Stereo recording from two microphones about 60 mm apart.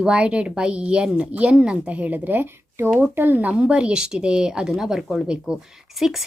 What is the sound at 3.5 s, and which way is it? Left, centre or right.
A woman's voice, centre.